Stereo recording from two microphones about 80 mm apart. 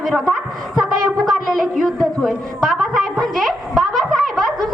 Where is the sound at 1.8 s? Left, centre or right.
Centre.